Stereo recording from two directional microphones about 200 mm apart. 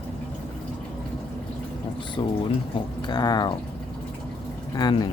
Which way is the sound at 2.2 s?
20° left (ahead or behind).